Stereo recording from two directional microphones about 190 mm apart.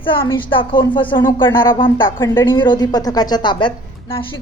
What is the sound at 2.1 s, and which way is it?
A woman's voice, 15° left (ahead or behind).